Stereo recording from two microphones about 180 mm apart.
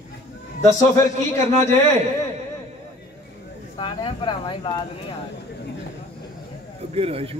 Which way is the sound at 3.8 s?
30° left (ahead or behind).